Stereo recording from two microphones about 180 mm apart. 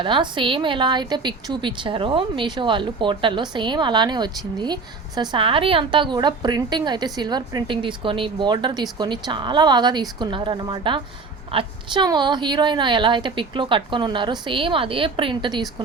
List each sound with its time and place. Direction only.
0.0 s a woman's voice: 25° right (ahead or behind)